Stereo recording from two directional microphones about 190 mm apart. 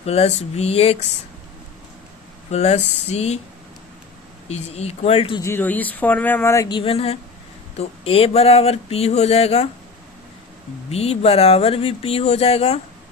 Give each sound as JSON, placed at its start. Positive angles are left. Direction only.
{"t": 0.0, "sound": "speech", "side_deg": 35}
{"t": 2.5, "sound": "speech", "side_deg": 35}
{"t": 4.4, "sound": "speech", "side_deg": 35}
{"t": 5.4, "sound": "speech", "side_deg": 10}
{"t": 10.9, "sound": "speech", "side_deg": 35}